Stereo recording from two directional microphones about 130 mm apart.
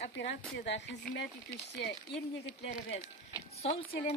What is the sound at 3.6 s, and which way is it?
Speech, 50° left (ahead or behind).